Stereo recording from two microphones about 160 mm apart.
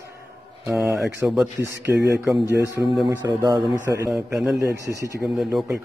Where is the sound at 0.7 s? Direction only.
Centre (ahead or behind).